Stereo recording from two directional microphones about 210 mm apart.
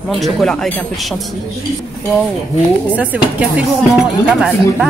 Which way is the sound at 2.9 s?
5° right (ahead or behind).